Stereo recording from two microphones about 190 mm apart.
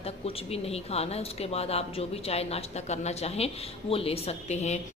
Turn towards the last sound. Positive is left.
turn(degrees=35)  # may be behind; listen again after turning